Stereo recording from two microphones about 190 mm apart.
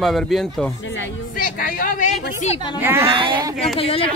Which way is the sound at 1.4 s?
45° left (ahead or behind).